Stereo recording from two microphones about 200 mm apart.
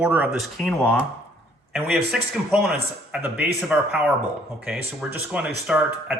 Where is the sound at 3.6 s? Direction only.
Centre (ahead or behind).